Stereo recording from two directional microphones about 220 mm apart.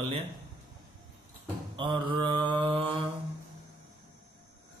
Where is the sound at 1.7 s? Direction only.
20° right (ahead or behind).